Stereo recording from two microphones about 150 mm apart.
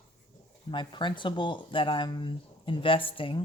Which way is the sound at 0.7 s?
30° left (ahead or behind).